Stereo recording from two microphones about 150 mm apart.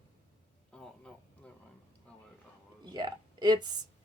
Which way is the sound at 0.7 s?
5° left (ahead or behind).